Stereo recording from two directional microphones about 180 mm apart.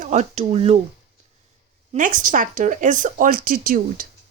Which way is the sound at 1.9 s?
45° right (ahead or behind).